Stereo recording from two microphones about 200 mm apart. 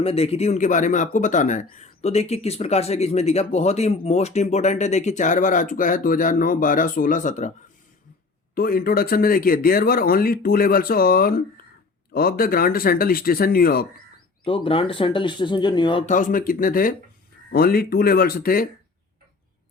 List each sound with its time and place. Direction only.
0.0 s speech: 30° left (ahead or behind)
8.5 s speech: 45° left (ahead or behind)
14.4 s speech: 25° left (ahead or behind)
16.0 s speech: 40° left (ahead or behind)